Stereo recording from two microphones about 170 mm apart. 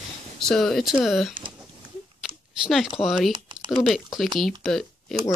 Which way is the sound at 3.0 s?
Centre (ahead or behind).